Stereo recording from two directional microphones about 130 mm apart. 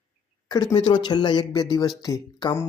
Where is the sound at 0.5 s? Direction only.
30° left (ahead or behind).